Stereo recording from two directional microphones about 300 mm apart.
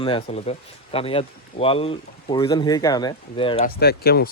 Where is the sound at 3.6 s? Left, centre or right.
Left.